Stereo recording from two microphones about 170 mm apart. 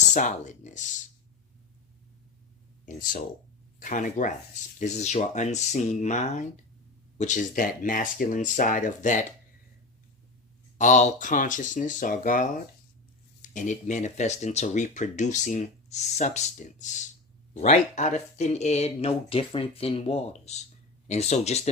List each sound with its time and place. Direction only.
0.1 s speech: 45° left (ahead or behind)
2.8 s speech: 50° left (ahead or behind)
10.8 s speech: 45° left (ahead or behind)
13.5 s speech: 45° left (ahead or behind)